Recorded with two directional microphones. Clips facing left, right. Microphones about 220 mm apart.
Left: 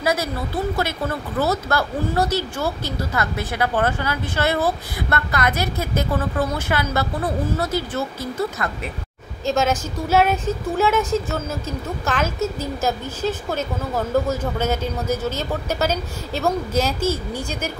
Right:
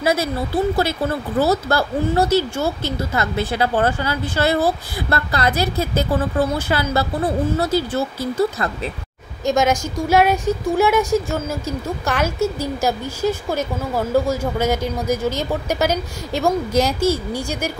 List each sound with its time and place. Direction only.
0.0 s a woman's voice: 25° right (ahead or behind)
1.4 s speech: 30° right (ahead or behind)
9.5 s a woman's voice: 15° right (ahead or behind)